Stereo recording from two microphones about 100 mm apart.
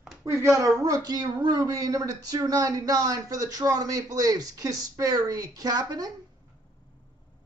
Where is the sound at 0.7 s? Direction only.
40° right (ahead or behind).